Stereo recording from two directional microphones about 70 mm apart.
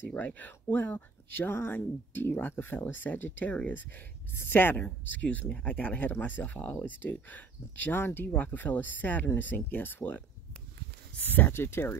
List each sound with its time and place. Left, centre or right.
0.1 s speech: left